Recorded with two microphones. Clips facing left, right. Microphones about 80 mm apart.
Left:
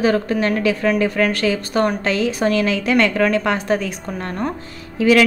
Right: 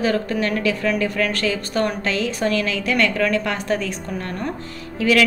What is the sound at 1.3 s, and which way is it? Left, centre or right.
A woman's voice, left.